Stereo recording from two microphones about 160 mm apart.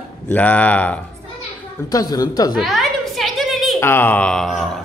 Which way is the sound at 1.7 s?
25° left (ahead or behind).